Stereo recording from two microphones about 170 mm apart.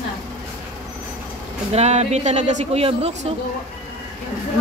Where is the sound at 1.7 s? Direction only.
40° right (ahead or behind).